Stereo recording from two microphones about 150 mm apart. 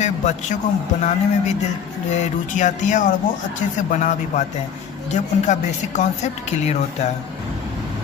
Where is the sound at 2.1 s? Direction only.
55° left (ahead or behind).